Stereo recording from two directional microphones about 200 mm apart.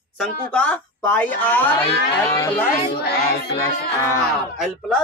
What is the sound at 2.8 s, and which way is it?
Child singing, 55° left (ahead or behind).